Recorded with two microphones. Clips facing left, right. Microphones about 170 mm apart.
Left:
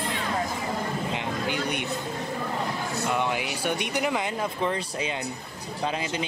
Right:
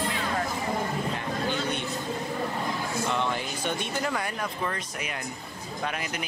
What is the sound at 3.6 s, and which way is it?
Speech, 15° left (ahead or behind).